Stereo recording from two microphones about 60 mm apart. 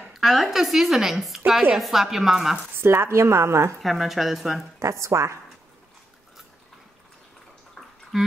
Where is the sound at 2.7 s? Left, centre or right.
Right.